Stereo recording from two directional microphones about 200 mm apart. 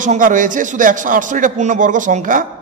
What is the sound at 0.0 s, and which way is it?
A man's voice, 40° right (ahead or behind).